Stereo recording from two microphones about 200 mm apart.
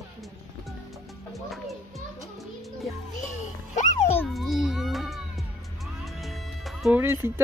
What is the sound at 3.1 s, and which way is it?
Music, 40° left (ahead or behind).